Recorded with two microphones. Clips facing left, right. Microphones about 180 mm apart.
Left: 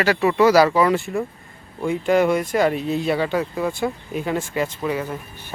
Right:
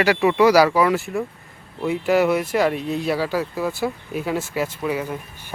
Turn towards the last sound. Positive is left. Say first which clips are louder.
# even
turn(degrees=-10)  # may be behind; listen again after turning